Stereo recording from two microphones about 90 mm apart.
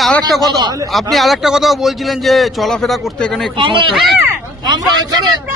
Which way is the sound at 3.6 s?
70° right (ahead or behind).